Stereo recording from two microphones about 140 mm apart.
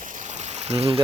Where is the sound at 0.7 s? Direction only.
45° right (ahead or behind).